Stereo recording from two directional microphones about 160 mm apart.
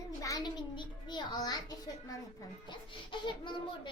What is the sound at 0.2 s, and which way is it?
A child's voice, 20° left (ahead or behind).